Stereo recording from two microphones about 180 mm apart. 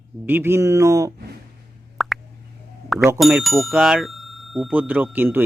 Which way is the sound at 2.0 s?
Centre (ahead or behind).